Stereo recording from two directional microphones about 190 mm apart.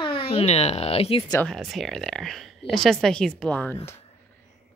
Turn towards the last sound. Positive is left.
turn(degrees=5)  # may be behind; listen again after turning